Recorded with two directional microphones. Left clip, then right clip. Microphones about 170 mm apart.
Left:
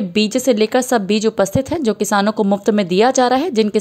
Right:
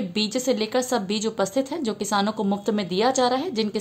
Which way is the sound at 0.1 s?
40° left (ahead or behind).